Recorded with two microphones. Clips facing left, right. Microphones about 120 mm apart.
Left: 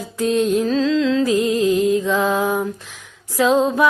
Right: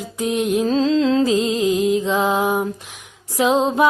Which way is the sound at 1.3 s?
20° right (ahead or behind).